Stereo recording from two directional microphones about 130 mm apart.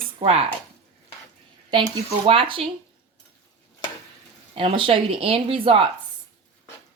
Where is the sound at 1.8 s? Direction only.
45° right (ahead or behind).